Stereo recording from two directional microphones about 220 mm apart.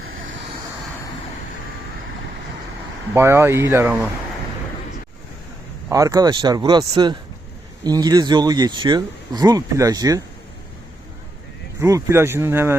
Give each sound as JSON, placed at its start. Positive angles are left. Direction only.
{"t": 3.2, "sound": "speech", "side_deg": -10}
{"t": 5.9, "sound": "speech", "side_deg": -15}
{"t": 11.8, "sound": "speech", "side_deg": -15}